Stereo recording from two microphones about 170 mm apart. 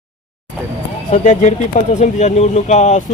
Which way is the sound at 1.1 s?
45° left (ahead or behind).